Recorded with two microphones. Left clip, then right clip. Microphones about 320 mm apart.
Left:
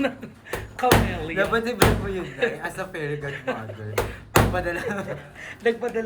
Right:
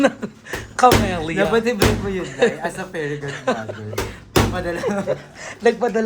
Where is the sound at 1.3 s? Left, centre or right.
Centre.